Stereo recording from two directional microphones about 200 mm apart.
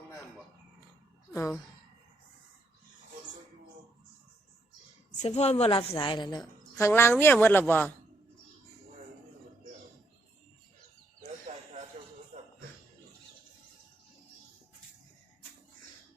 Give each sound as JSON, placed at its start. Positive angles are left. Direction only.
{"t": 5.1, "sound": "a woman's voice", "side_deg": 35}
{"t": 11.5, "sound": "a sound", "side_deg": -35}
{"t": 12.3, "sound": "music", "side_deg": -35}